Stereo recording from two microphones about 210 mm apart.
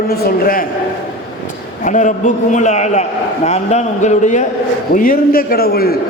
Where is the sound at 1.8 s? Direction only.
35° left (ahead or behind).